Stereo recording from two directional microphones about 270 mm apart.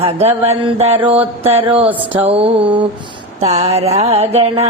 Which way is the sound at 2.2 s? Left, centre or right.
Right.